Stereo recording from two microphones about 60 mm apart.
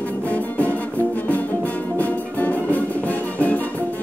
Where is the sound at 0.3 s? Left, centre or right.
Left.